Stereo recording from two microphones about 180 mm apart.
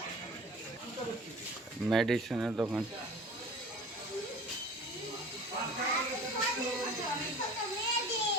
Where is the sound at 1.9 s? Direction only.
Centre (ahead or behind).